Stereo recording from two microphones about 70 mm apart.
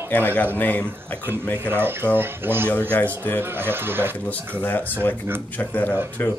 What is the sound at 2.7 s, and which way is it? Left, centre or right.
Speech, left.